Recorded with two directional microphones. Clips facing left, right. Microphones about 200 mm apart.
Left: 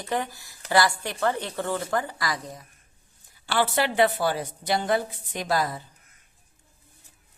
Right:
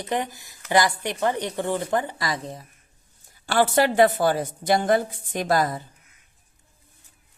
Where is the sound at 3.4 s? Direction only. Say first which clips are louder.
Right 5 dB; 45° right (ahead or behind).